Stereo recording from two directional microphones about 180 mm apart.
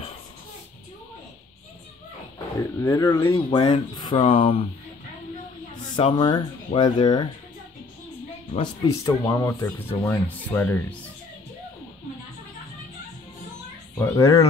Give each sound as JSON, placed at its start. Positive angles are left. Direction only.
{"t": 2.3, "sound": "speech", "side_deg": 15}
{"t": 3.4, "sound": "speech", "side_deg": 30}
{"t": 5.9, "sound": "speech", "side_deg": 30}
{"t": 8.8, "sound": "speech", "side_deg": 15}
{"t": 13.9, "sound": "speech", "side_deg": 20}